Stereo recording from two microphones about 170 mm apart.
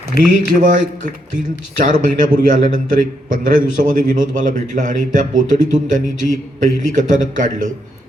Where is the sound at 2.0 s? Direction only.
55° right (ahead or behind).